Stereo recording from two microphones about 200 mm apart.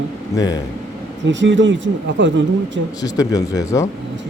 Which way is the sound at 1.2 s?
65° right (ahead or behind).